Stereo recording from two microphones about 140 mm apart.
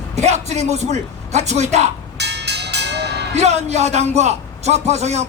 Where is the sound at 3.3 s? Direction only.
50° right (ahead or behind).